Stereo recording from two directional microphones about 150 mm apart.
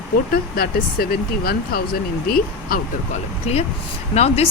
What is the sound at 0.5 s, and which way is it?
Speech, 90° left.